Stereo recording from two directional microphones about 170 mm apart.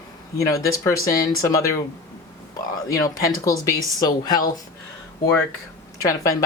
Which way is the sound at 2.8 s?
20° left (ahead or behind).